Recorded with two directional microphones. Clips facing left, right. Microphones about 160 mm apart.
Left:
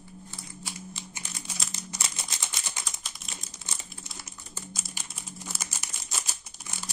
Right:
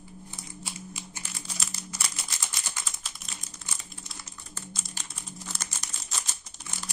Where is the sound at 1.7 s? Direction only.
20° left (ahead or behind).